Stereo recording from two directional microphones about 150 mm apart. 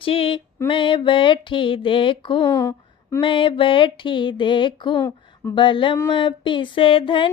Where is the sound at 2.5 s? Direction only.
20° left (ahead or behind).